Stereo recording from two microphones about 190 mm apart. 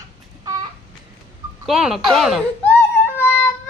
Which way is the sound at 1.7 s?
Centre (ahead or behind).